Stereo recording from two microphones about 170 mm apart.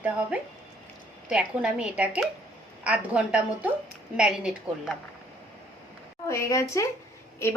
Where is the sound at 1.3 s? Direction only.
5° right (ahead or behind).